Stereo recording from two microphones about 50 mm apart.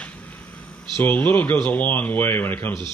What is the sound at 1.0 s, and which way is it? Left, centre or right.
Speech, left.